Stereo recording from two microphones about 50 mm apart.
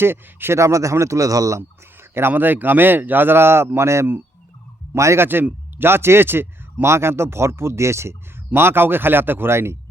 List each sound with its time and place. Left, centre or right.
0.0 s speech: right
0.6 s a man's voice: right
2.0 s speech: right
3.8 s speech: right
4.9 s speech: right
5.2 s speech: right
8.5 s speech: right